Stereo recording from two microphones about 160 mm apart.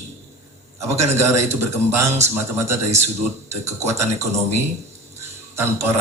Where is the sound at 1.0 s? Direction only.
15° right (ahead or behind).